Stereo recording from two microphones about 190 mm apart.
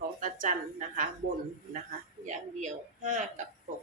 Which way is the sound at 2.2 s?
40° right (ahead or behind).